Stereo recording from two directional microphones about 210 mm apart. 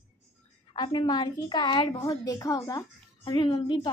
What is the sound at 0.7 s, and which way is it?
A woman's voice, 20° left (ahead or behind).